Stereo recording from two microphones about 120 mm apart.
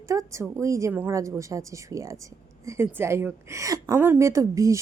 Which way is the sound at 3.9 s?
20° right (ahead or behind).